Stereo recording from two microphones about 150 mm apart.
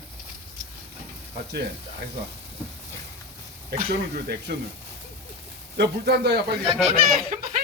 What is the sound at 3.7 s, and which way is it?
Speech, 90° right.